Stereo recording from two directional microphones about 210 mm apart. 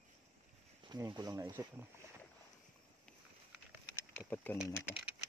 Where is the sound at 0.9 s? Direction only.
20° right (ahead or behind).